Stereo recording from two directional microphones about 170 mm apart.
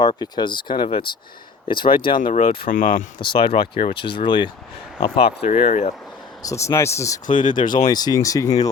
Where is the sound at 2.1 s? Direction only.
55° left (ahead or behind).